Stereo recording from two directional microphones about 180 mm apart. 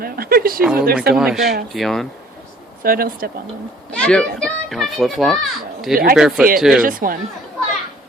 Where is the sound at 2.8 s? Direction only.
55° right (ahead or behind).